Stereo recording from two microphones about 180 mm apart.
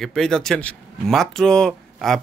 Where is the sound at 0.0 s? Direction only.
5° left (ahead or behind).